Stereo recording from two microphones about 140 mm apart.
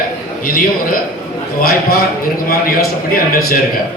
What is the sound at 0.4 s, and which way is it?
Speech, 90° left.